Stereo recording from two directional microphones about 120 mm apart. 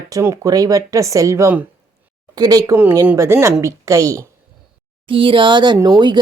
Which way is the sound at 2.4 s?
30° right (ahead or behind).